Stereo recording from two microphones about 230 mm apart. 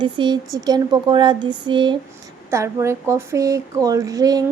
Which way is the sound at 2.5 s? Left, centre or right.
Centre.